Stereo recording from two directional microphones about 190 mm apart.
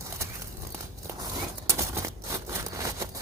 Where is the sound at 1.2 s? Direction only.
15° right (ahead or behind).